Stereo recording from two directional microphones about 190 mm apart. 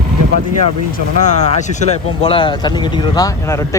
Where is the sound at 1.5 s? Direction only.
35° left (ahead or behind); by 3.8 s 15° left (ahead or behind).